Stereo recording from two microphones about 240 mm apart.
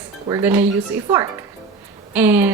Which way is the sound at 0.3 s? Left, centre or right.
Centre.